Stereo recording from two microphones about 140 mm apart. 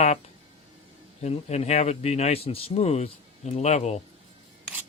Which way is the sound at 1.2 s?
50° left (ahead or behind).